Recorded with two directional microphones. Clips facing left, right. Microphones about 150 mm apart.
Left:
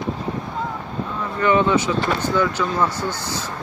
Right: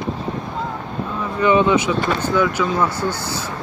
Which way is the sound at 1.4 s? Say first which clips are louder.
Right 2 dB; 15° right (ahead or behind).